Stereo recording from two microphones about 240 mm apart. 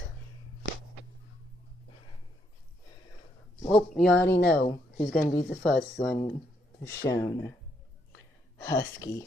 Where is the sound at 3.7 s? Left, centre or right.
Centre.